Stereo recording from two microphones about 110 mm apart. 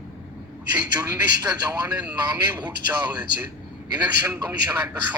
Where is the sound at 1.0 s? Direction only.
35° right (ahead or behind).